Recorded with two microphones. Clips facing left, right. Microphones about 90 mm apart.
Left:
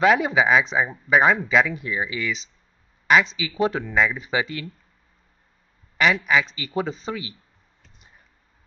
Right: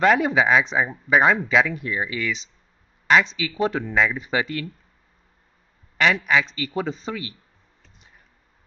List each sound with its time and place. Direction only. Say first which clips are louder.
0.0 s speech: even; 5° left (ahead or behind)
3.4 s speech: even; 15° left (ahead or behind)
3.8 s speech: even; centre (ahead or behind)
5.9 s speech: even; 5° left (ahead or behind)
6.6 s speech: even; 15° left (ahead or behind)